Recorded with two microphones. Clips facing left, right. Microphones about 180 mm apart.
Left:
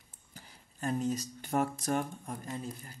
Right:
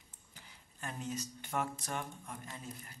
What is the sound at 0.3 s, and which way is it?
Speech, 40° left (ahead or behind).